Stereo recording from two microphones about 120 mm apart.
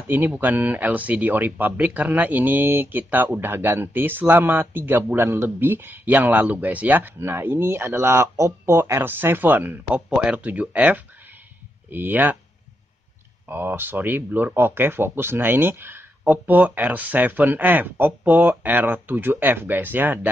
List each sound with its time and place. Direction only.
0.1 s speech: 15° right (ahead or behind)
13.5 s speech: 15° right (ahead or behind)